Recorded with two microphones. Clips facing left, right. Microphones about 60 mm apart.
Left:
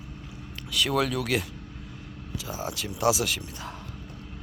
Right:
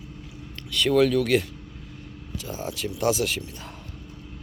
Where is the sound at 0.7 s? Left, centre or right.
Centre.